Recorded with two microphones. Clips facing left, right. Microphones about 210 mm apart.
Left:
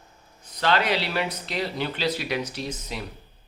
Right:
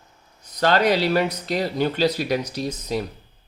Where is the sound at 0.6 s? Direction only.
40° right (ahead or behind).